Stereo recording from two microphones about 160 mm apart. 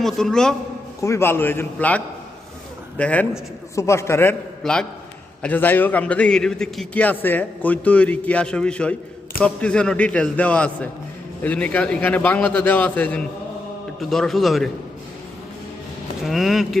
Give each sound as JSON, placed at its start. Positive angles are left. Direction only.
{"t": 0.0, "sound": "a man's voice", "side_deg": 5}
{"t": 1.0, "sound": "a man's voice", "side_deg": 15}
{"t": 3.0, "sound": "a man's voice", "side_deg": 10}
{"t": 4.6, "sound": "a man's voice", "side_deg": 5}
{"t": 16.2, "sound": "a man's voice", "side_deg": 0}